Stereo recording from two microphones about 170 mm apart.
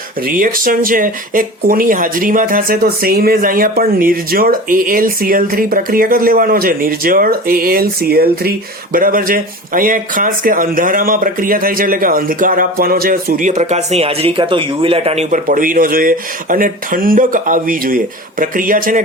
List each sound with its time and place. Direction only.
0.3 s speech: 55° right (ahead or behind)
15.4 s speech: 55° right (ahead or behind)